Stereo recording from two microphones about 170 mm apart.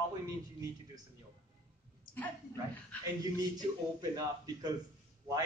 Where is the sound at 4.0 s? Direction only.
25° right (ahead or behind).